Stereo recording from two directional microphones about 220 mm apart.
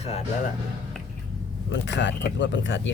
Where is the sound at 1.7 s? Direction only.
55° left (ahead or behind).